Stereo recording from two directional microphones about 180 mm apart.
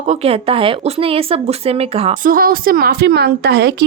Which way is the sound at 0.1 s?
35° right (ahead or behind).